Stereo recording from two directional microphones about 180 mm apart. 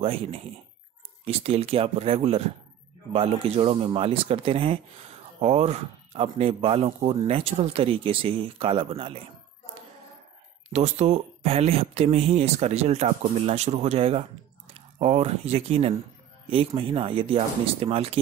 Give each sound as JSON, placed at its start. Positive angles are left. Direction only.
{"t": 0.0, "sound": "speech", "side_deg": -30}
{"t": 10.7, "sound": "speech", "side_deg": -40}